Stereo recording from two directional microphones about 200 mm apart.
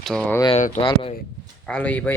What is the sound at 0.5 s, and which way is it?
Speech, 40° left (ahead or behind).